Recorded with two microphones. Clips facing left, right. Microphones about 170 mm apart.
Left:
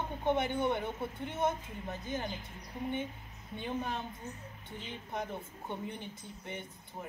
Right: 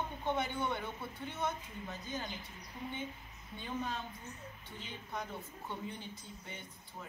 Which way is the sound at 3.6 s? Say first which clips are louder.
Left 3 dB; 55° left (ahead or behind).